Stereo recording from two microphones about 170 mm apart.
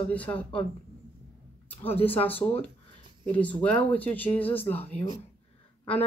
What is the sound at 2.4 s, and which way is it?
Speech, 10° left (ahead or behind).